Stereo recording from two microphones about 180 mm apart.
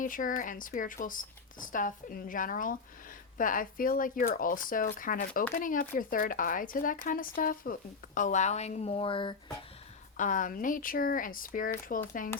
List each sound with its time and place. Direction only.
0.0 s speech: 50° left (ahead or behind); by 9.3 s 30° left (ahead or behind)
10.2 s speech: 45° left (ahead or behind)